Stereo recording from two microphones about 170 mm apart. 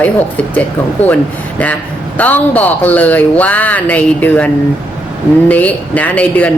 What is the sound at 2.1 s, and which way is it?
A woman's voice, 10° left (ahead or behind).